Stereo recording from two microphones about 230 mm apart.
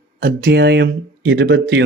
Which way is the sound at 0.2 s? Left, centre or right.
Right.